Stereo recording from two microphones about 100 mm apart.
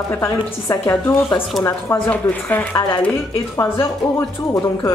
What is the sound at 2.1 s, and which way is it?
Speech, 15° left (ahead or behind).